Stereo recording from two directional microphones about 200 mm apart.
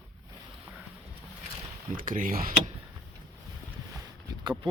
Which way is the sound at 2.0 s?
45° right (ahead or behind).